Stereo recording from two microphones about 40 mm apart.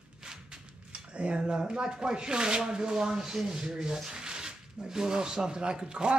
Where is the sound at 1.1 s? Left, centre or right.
Right.